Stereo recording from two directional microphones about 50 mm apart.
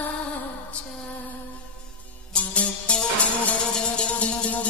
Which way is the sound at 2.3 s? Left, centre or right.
Left.